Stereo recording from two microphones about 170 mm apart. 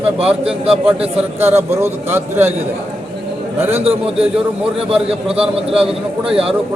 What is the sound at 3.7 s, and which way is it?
Speech, 35° right (ahead or behind).